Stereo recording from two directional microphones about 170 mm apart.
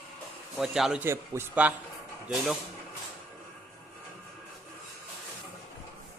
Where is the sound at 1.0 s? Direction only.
15° right (ahead or behind).